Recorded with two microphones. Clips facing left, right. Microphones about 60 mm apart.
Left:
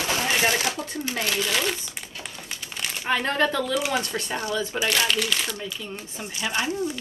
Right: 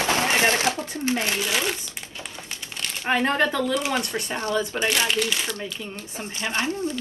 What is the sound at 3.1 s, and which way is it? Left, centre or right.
Speech, right.